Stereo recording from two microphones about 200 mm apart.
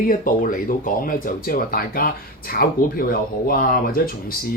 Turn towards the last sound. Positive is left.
turn(degrees=45)  # may be behind; listen again after turning